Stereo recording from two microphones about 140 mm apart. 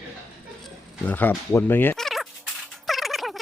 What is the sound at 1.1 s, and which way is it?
Speech, 10° left (ahead or behind).